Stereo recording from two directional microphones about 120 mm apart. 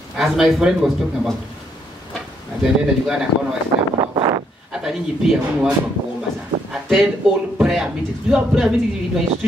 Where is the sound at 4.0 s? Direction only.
35° right (ahead or behind).